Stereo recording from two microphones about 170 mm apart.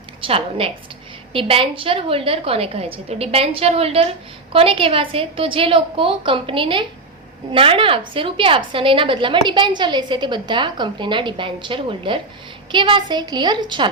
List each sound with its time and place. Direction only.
0.2 s a woman's voice: 35° right (ahead or behind)